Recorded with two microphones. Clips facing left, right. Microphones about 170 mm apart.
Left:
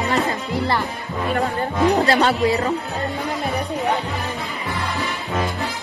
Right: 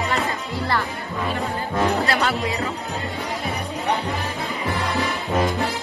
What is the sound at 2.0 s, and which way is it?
Speech, 35° left (ahead or behind).